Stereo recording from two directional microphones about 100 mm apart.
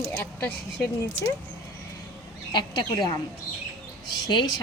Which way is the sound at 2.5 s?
50° left (ahead or behind).